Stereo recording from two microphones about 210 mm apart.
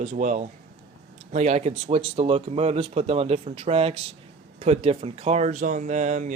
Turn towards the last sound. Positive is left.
turn(degrees=-35)  # may be behind; listen again after turning